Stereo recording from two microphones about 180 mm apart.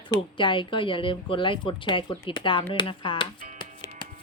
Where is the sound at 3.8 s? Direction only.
20° left (ahead or behind).